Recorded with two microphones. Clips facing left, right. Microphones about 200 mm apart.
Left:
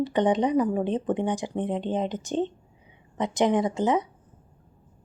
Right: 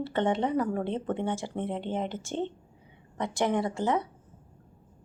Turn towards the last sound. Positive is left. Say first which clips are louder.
# left 4 dB
turn(degrees=20)  # may be behind; listen again after turning